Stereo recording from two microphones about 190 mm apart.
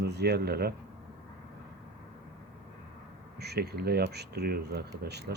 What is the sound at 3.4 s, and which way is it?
Speech, 60° right (ahead or behind).